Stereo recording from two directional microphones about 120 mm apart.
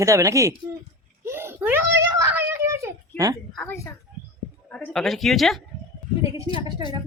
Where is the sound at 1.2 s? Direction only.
20° right (ahead or behind).